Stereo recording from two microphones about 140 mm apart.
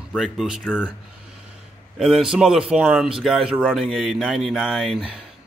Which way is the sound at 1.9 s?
5° right (ahead or behind).